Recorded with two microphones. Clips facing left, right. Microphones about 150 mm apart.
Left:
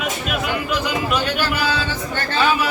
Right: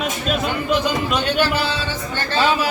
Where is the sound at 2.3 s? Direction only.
30° right (ahead or behind).